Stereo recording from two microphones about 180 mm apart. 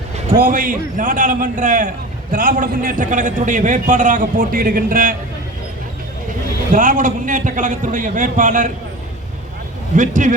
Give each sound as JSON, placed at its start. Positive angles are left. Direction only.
{"t": 0.3, "sound": "a man's voice", "side_deg": -50}
{"t": 6.7, "sound": "a man's voice", "side_deg": -45}
{"t": 9.9, "sound": "a man's voice", "side_deg": -45}